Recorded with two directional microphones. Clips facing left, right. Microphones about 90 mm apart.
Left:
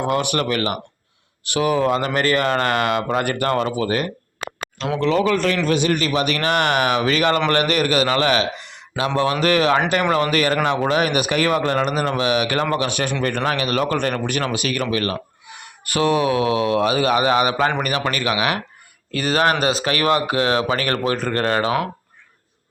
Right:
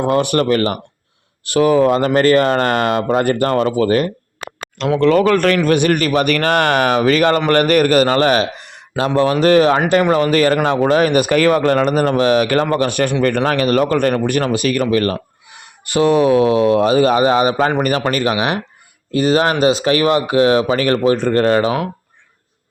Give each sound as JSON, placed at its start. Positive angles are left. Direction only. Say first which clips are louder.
{"t": 0.0, "sound": "speech", "louder": "right 5 dB", "side_deg": -35}
{"t": 4.9, "sound": "speech", "louder": "right 6 dB", "side_deg": -55}
{"t": 21.2, "sound": "speech", "louder": "right 7 dB", "side_deg": 40}
{"t": 21.6, "sound": "speech", "louder": "right 3 dB", "side_deg": -25}